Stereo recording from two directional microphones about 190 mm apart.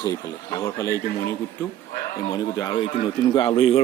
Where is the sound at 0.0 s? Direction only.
20° left (ahead or behind).